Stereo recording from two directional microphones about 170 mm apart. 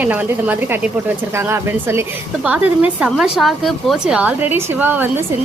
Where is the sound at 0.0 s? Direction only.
10° right (ahead or behind).